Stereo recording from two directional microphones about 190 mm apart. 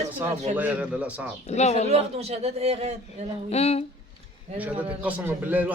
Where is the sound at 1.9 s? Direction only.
35° right (ahead or behind).